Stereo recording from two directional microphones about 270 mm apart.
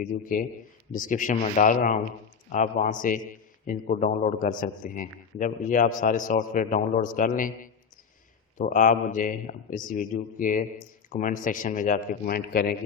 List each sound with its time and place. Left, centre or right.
0.0 s a man's voice: left